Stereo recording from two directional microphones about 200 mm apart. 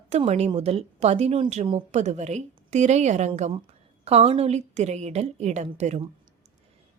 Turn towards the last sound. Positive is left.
turn(degrees=-35)  # may be behind; listen again after turning